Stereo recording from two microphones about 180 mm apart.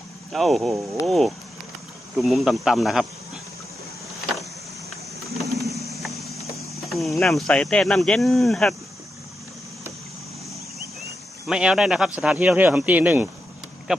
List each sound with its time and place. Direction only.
0.3 s speech: centre (ahead or behind)
5.4 s bird: centre (ahead or behind)
6.8 s cricket: centre (ahead or behind)
7.2 s speech: centre (ahead or behind)
11.4 s speech: 5° right (ahead or behind)